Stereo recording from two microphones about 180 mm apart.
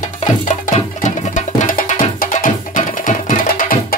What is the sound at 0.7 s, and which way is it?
Music, 40° left (ahead or behind).